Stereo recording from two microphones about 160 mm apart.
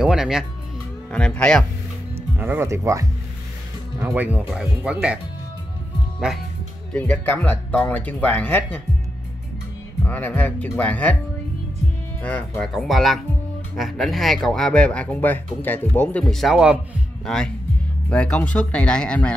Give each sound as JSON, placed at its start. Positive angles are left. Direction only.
{"t": 0.0, "sound": "speech", "side_deg": -5}
{"t": 2.1, "sound": "speech", "side_deg": -10}
{"t": 6.9, "sound": "speech", "side_deg": 5}
{"t": 10.0, "sound": "speech", "side_deg": 10}
{"t": 12.2, "sound": "speech", "side_deg": 10}